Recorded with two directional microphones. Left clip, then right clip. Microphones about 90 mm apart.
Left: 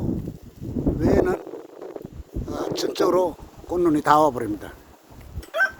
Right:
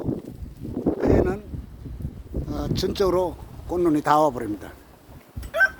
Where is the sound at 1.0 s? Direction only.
85° left.